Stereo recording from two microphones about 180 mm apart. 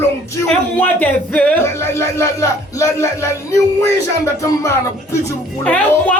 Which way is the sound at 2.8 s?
15° left (ahead or behind).